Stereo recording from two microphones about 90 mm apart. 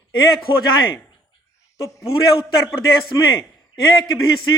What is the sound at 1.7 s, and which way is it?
Speech, 35° left (ahead or behind).